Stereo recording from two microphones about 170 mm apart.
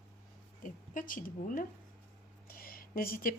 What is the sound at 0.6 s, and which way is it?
A woman's voice, 50° left (ahead or behind).